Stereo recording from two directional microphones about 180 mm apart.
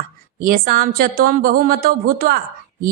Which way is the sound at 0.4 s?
55° right (ahead or behind).